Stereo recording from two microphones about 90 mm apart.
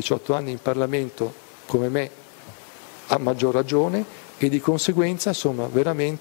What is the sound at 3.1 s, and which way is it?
Speech, 10° right (ahead or behind).